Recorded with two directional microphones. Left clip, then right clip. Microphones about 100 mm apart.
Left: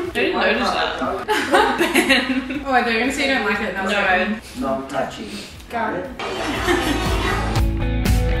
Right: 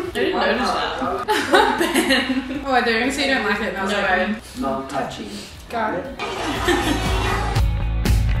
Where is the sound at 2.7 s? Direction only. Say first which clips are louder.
Even; 15° right (ahead or behind).